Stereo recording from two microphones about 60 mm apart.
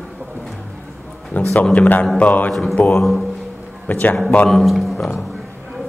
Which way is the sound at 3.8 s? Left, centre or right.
Left.